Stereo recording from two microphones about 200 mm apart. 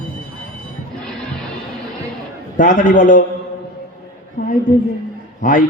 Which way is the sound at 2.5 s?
40° left (ahead or behind).